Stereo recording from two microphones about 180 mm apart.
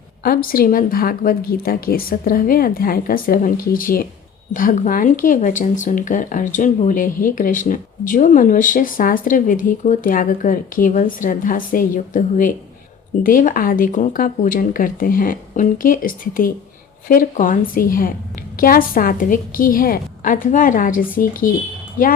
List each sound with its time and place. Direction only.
0.2 s speech: 55° left (ahead or behind)